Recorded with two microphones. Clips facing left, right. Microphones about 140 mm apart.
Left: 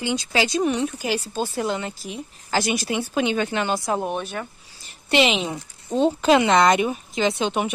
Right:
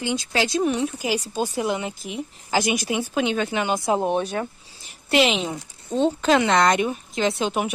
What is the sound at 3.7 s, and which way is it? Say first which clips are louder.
Speech: right 3 dB; 20° right (ahead or behind).